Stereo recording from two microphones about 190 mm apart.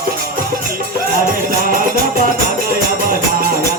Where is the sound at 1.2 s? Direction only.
50° right (ahead or behind).